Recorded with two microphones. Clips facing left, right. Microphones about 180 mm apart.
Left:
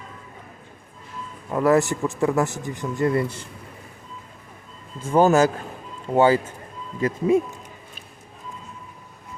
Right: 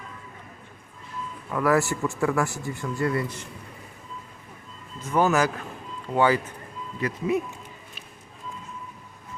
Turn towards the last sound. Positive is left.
turn(degrees=25)  # may be behind; listen again after turning